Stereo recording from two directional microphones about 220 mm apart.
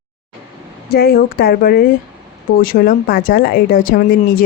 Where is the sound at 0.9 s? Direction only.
45° left (ahead or behind).